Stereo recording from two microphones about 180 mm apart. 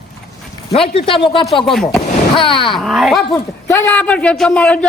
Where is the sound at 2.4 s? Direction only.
30° left (ahead or behind).